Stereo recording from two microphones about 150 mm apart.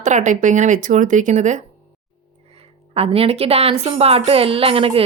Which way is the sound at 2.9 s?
40° right (ahead or behind).